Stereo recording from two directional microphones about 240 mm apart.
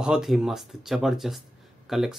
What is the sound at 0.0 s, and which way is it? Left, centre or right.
Speech, centre.